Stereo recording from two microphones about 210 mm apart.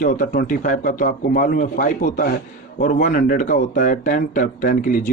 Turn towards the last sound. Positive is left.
turn(degrees=40)  # may be behind; listen again after turning